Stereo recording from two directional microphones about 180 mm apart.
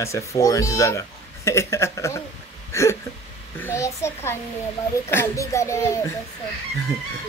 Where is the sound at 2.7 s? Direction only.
15° left (ahead or behind).